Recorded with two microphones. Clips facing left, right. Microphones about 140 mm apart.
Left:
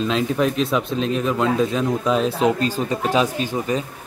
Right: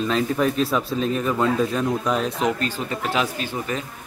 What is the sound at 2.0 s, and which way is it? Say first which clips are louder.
Speech: left 4 dB; 25° left (ahead or behind).